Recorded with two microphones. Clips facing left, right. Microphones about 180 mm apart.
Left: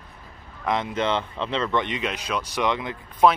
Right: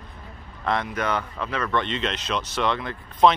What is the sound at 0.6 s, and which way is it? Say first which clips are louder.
Speech: left 1 dB; 20° left (ahead or behind).